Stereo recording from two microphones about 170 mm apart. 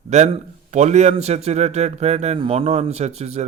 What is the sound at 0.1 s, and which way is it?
A man's voice, 40° right (ahead or behind).